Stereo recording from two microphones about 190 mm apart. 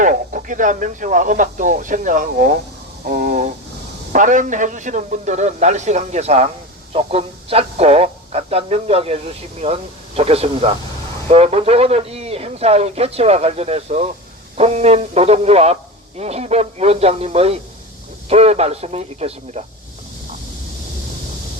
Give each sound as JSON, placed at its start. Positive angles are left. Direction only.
{"t": 0.0, "sound": "speech", "side_deg": -45}